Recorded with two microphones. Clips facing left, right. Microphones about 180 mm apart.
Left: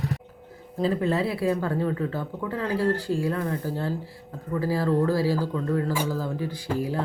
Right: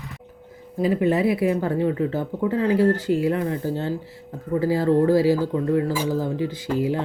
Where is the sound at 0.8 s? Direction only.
15° right (ahead or behind).